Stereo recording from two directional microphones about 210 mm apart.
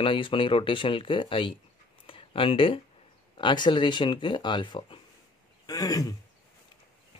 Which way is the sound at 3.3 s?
20° left (ahead or behind).